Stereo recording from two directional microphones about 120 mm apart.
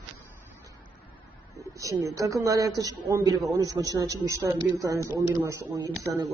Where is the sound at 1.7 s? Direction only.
25° right (ahead or behind).